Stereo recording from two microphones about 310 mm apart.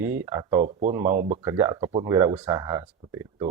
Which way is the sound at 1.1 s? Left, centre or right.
Right.